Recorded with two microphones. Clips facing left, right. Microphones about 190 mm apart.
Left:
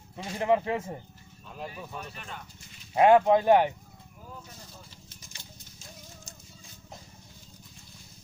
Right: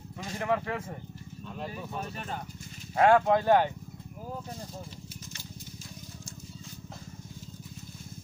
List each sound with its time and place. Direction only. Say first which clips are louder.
0.2 s speech: left 4 dB; 20° left (ahead or behind)
1.7 s speech: right 3 dB; 40° right (ahead or behind)
2.9 s speech: left 3 dB; 15° left (ahead or behind)